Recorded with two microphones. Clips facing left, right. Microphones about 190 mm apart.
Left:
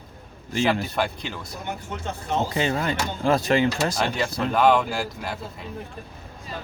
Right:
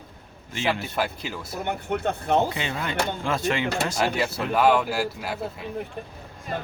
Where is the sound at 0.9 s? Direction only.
5° right (ahead or behind).